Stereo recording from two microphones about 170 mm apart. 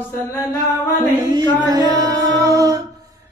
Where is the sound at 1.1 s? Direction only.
25° right (ahead or behind).